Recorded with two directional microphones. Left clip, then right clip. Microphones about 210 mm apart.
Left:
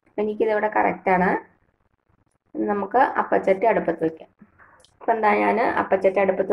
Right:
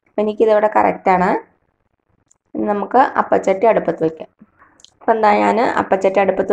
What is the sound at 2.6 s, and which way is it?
A woman's voice, 25° right (ahead or behind).